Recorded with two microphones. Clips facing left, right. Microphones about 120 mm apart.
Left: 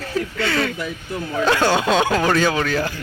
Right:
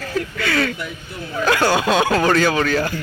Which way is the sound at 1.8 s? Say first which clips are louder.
Even; 15° right (ahead or behind).